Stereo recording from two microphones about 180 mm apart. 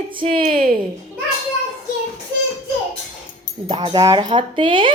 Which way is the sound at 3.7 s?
25° right (ahead or behind).